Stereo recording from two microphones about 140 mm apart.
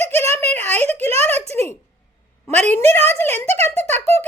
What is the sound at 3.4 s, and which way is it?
Speech, 50° right (ahead or behind).